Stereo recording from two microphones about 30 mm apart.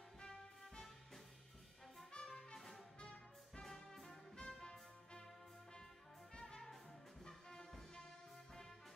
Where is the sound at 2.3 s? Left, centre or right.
Left.